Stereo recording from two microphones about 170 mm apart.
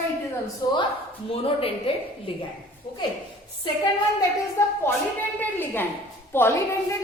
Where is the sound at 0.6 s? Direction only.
20° left (ahead or behind).